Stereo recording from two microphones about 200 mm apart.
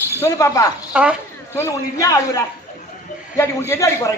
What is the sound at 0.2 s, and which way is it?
Speech, 15° left (ahead or behind).